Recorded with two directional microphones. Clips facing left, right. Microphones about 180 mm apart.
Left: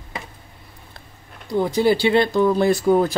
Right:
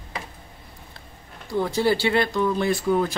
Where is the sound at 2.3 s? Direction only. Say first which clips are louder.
Left 5 dB; 40° left (ahead or behind).